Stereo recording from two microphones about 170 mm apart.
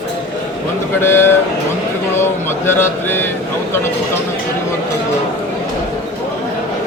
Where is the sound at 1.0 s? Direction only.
15° left (ahead or behind).